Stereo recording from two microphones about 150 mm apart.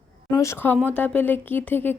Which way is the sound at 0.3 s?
20° left (ahead or behind).